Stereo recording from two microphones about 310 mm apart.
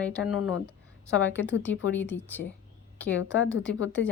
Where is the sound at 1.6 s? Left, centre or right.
Centre.